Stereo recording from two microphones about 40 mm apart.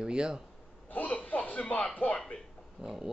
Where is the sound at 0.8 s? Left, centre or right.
Left.